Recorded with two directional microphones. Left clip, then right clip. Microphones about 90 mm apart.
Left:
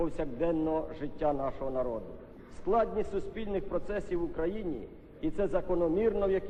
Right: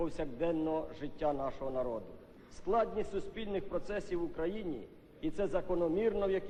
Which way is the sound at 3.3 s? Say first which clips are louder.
Left 3 dB; 35° right (ahead or behind).